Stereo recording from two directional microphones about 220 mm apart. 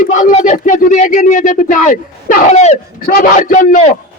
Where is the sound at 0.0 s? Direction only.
35° left (ahead or behind).